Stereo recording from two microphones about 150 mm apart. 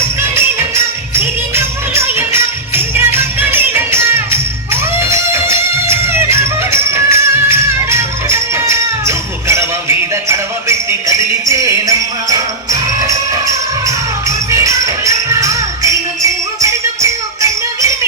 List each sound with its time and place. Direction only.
1.1 s music: 15° right (ahead or behind)
11.4 s music: 20° right (ahead or behind)